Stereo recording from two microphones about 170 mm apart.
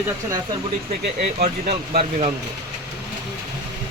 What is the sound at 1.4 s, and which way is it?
Speech, 40° right (ahead or behind).